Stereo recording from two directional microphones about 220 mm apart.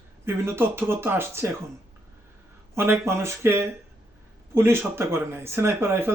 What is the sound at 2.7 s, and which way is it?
A woman's voice, 10° right (ahead or behind).